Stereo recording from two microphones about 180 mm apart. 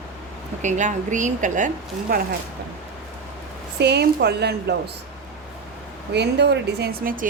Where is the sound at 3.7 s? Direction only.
65° right (ahead or behind).